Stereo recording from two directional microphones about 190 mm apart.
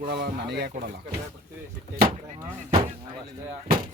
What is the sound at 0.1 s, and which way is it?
Speech, 60° right (ahead or behind).